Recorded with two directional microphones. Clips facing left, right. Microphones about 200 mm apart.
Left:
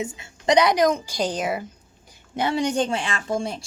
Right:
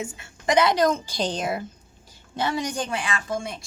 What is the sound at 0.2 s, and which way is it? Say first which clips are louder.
A woman's voice: left 2 dB; 20° left (ahead or behind).